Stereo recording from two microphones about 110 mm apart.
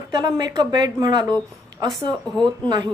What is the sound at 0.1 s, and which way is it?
Speech, 40° right (ahead or behind).